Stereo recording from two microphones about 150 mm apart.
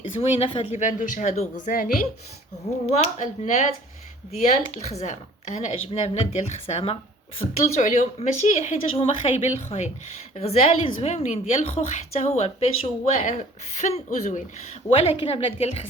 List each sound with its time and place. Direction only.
0.0 s a woman's voice: 40° left (ahead or behind)
0.8 s a woman's voice: 60° left (ahead or behind)
2.8 s a woman's voice: 50° left (ahead or behind)
15.2 s a woman's voice: 40° left (ahead or behind)